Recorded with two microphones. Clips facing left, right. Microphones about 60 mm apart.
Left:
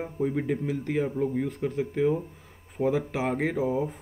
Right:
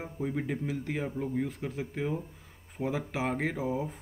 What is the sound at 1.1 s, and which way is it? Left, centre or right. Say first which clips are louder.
Speech: left 6 dB; centre.